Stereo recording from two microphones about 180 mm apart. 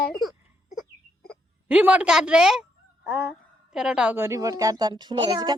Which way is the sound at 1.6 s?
10° right (ahead or behind).